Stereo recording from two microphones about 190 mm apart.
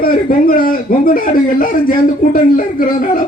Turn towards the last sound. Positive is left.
turn(degrees=45)  # may be behind; listen again after turning